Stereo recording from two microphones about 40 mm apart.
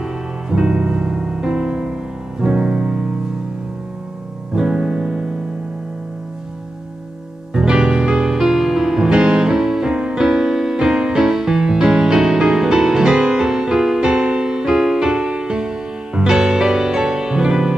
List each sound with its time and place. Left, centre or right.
0.0 s music: centre
4.6 s music: centre
7.5 s music: centre